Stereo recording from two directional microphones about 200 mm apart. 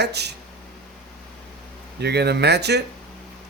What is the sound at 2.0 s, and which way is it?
Speech, 55° right (ahead or behind).